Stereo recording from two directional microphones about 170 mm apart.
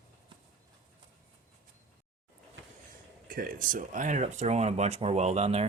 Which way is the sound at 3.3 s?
55° right (ahead or behind).